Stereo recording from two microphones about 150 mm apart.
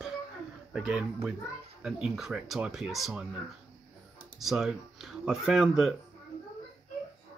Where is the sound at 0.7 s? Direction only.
5° right (ahead or behind).